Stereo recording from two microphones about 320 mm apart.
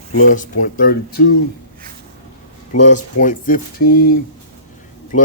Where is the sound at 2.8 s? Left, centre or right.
Left.